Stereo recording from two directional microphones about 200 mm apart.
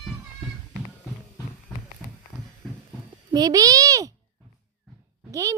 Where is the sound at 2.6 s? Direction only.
Centre (ahead or behind).